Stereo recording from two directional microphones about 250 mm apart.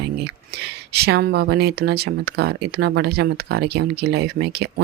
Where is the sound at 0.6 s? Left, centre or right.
Right.